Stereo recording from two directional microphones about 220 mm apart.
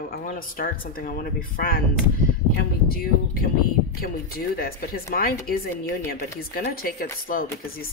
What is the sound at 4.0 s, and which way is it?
Speech, 40° left (ahead or behind).